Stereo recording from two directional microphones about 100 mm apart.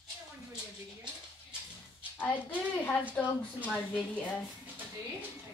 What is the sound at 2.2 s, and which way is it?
A woman's voice, 20° left (ahead or behind).